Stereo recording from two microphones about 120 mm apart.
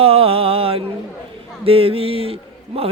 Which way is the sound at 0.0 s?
55° right (ahead or behind).